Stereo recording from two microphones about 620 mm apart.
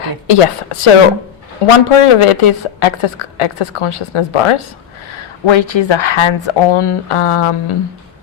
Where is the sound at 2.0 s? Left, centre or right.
Left.